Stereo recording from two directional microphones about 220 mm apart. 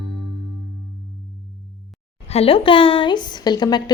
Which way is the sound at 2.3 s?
25° left (ahead or behind).